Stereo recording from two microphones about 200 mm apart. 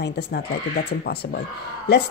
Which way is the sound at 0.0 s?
55° left (ahead or behind).